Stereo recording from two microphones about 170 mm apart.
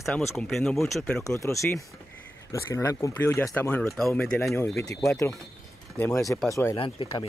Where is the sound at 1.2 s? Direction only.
15° left (ahead or behind).